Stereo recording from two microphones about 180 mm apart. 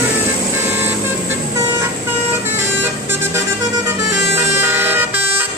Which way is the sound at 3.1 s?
15° right (ahead or behind).